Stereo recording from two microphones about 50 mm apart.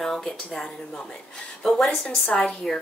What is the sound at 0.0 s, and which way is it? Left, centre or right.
Speech, centre.